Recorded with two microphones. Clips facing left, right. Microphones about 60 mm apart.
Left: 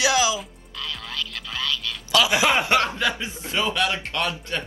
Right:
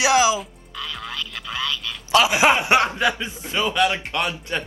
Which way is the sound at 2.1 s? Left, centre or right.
Right.